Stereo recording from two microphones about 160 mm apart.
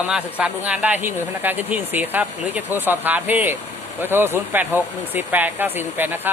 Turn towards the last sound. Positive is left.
turn(degrees=-10)  # may be behind; listen again after turning